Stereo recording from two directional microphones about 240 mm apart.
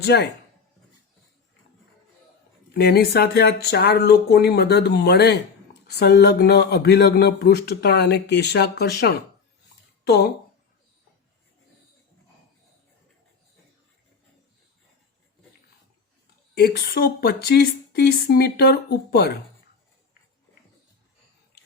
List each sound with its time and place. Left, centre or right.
0.0 s speech: left
2.7 s a woman's voice: left
16.6 s a woman's voice: left